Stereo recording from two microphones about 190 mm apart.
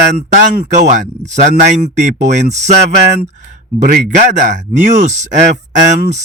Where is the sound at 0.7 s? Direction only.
40° right (ahead or behind).